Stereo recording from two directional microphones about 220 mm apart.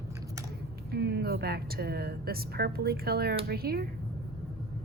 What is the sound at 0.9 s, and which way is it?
Speech, 50° right (ahead or behind).